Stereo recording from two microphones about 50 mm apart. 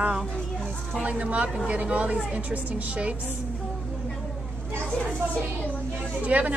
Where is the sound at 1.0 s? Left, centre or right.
Right.